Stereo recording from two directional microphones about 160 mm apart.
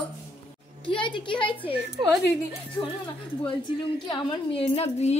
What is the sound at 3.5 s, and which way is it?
A woman's voice, 30° left (ahead or behind).